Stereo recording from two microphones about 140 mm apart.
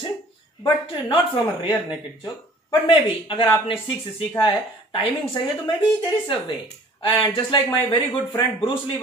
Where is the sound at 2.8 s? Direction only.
40° left (ahead or behind).